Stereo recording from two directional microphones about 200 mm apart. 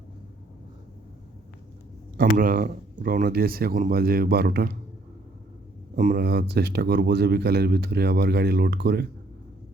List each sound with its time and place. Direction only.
2.3 s speech: 45° right (ahead or behind)
6.0 s speech: 45° right (ahead or behind)